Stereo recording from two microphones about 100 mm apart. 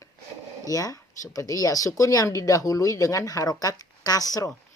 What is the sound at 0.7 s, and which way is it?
Speech, 35° left (ahead or behind).